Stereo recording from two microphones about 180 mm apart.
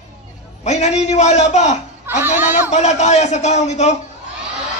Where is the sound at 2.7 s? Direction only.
40° left (ahead or behind).